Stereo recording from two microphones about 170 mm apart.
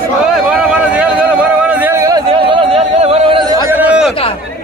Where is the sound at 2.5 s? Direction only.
35° right (ahead or behind).